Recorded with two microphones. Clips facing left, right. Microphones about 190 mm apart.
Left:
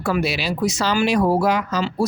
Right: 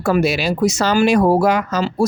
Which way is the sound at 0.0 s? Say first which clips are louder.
Right 5 dB; 45° right (ahead or behind).